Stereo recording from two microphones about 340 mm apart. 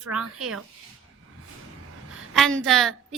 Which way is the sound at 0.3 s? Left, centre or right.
Right.